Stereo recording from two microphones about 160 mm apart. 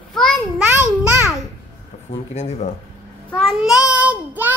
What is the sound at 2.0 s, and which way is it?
Speech, 45° left (ahead or behind).